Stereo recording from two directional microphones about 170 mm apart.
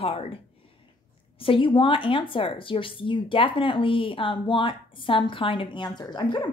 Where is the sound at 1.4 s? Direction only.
30° left (ahead or behind).